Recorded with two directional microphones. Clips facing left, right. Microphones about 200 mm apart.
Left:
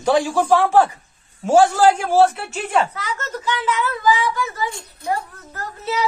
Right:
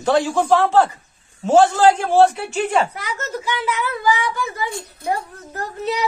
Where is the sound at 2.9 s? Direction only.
15° right (ahead or behind).